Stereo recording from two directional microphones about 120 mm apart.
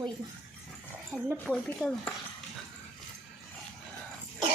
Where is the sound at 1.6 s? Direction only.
15° left (ahead or behind).